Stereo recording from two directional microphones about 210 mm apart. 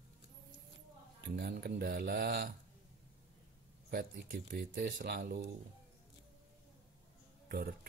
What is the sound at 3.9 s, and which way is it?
Speech, 45° right (ahead or behind).